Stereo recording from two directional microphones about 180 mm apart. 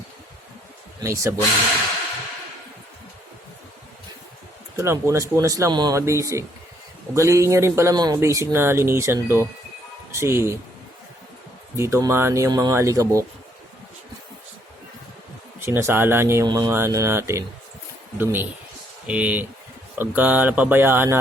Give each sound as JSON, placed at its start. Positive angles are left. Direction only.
{"t": 1.0, "sound": "speech", "side_deg": -15}
{"t": 4.8, "sound": "speech", "side_deg": -15}
{"t": 11.8, "sound": "speech", "side_deg": -15}
{"t": 15.6, "sound": "speech", "side_deg": -15}